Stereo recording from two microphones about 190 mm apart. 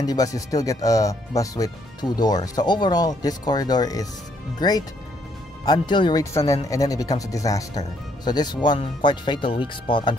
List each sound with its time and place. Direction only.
0.0 s speech: 20° left (ahead or behind)